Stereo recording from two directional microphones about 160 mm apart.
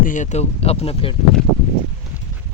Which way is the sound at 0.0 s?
50° left (ahead or behind).